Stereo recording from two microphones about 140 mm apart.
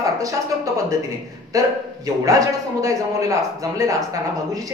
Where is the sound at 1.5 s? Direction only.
25° right (ahead or behind).